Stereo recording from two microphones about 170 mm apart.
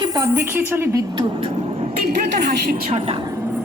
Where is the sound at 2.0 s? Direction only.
65° right (ahead or behind).